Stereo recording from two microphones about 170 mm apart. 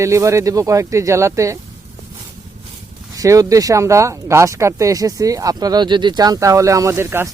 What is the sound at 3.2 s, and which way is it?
Speech, 20° right (ahead or behind).